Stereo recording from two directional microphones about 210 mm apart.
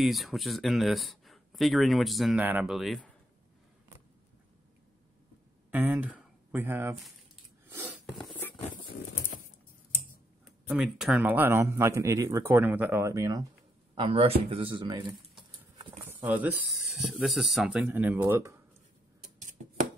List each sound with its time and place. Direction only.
0.0 s speech: centre (ahead or behind)
5.7 s a sound: 10° right (ahead or behind)
10.4 s speech: centre (ahead or behind)
13.9 s speech: 25° right (ahead or behind)
16.0 s speech: 10° right (ahead or behind)